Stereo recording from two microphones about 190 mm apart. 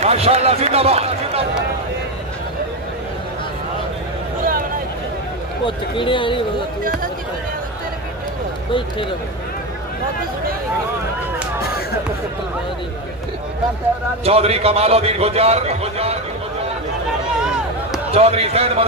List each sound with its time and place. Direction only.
0.0 s speech: 35° right (ahead or behind)
5.7 s speech: 25° left (ahead or behind)
14.2 s a man's voice: 30° right (ahead or behind)
17.4 s a sound: 5° right (ahead or behind)
18.1 s a man's voice: 30° right (ahead or behind)